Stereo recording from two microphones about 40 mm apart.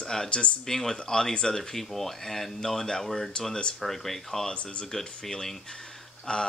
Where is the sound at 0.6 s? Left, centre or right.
Centre.